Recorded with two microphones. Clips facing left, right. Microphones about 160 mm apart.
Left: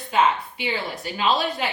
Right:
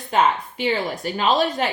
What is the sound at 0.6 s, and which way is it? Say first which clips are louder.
A woman's voice: right 7 dB; 45° right (ahead or behind).